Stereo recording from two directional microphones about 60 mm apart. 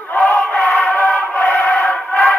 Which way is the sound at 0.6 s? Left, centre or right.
Left.